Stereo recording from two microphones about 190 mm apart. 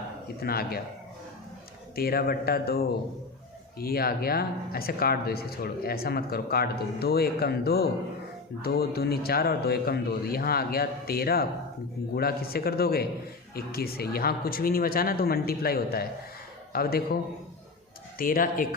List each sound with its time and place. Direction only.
0.3 s speech: 55° left (ahead or behind)
2.0 s speech: 55° left (ahead or behind)
18.2 s speech: 50° left (ahead or behind)